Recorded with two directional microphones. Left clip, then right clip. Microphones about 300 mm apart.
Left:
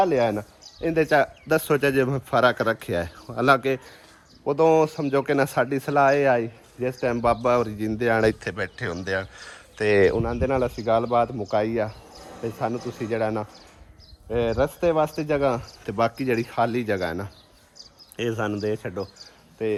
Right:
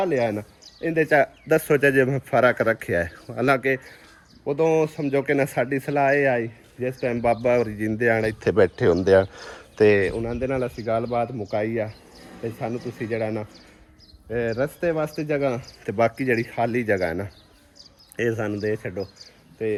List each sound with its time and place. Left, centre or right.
0.0 s speech: centre
10.0 s speech: left
10.2 s speech: centre
19.6 s speech: centre